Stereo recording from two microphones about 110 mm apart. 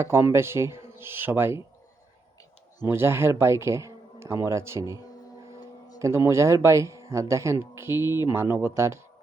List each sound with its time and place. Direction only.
0.0 s speech: 25° right (ahead or behind)
2.8 s speech: 20° right (ahead or behind)
6.0 s speech: 25° right (ahead or behind)